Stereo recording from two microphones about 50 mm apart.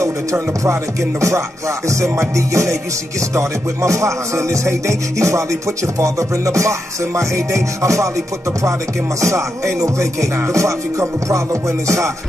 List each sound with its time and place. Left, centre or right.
0.0 s music: right
1.9 s music: right
9.2 s music: right